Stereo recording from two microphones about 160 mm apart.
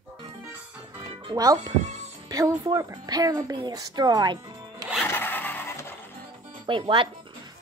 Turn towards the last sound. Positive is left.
turn(degrees=-30)  # may be behind; listen again after turning